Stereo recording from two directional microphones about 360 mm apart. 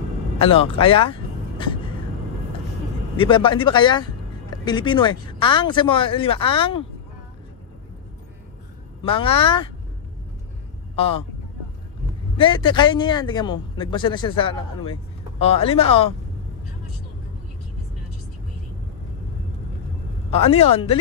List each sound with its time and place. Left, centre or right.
0.4 s speech: centre
3.2 s a man's voice: centre
9.0 s a man's voice: centre
11.0 s a man's voice: centre
12.4 s a man's voice: centre
20.2 s a man's voice: centre